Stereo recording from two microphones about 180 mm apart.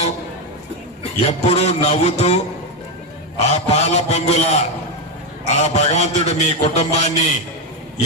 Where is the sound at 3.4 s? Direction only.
40° left (ahead or behind).